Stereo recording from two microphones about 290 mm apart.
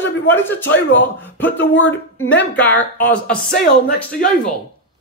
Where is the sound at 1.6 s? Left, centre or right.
Left.